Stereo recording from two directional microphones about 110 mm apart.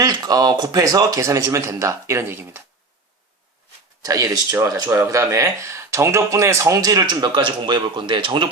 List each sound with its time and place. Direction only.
0.0 s a man's voice: 35° right (ahead or behind); by 2.6 s 20° right (ahead or behind)
4.0 s speech: 30° right (ahead or behind); by 8.4 s 45° right (ahead or behind)